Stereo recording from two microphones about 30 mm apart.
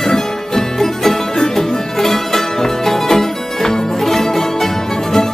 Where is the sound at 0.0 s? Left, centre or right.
Centre.